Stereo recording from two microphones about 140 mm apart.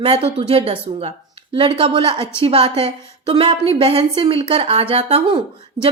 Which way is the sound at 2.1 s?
20° left (ahead or behind).